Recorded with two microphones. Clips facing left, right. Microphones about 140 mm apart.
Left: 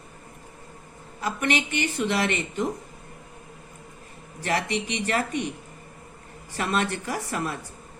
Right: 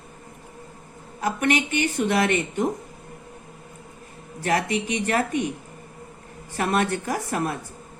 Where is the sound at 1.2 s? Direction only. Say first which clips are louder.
Right 3 dB; 50° right (ahead or behind).